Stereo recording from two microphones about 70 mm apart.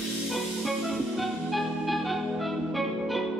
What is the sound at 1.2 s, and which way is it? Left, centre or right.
Music, centre.